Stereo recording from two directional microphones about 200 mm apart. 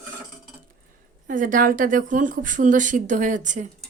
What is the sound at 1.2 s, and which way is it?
A woman's voice, 40° right (ahead or behind).